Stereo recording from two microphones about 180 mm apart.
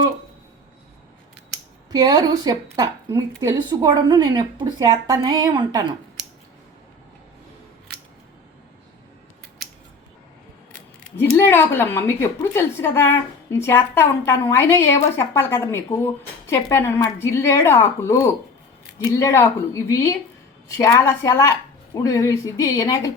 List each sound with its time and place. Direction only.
1.9 s speech: 20° right (ahead or behind)
11.3 s a woman's voice: 10° left (ahead or behind)